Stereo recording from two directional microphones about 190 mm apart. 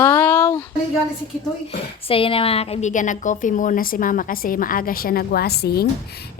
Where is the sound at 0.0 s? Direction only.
10° left (ahead or behind).